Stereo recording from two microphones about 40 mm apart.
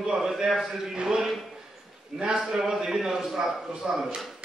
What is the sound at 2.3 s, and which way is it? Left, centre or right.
A man's voice, centre.